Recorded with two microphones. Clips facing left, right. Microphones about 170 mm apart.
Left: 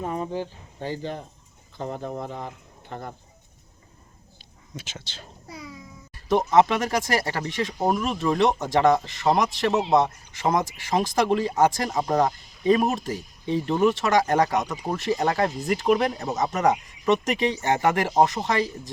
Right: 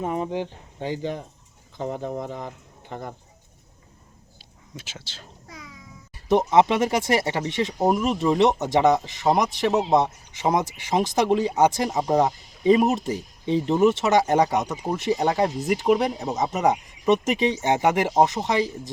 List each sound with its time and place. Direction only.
0.0 s speech: 15° right (ahead or behind)
4.9 s a woman's voice: 5° right (ahead or behind)
5.5 s music: 30° left (ahead or behind)
6.2 s speech: 20° right (ahead or behind)